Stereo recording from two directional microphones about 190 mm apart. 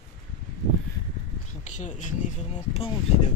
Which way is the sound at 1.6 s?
40° left (ahead or behind).